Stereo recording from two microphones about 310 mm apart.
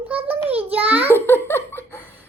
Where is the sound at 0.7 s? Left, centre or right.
Centre.